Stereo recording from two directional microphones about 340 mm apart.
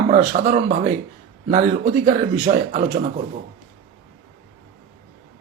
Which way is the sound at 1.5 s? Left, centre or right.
Right.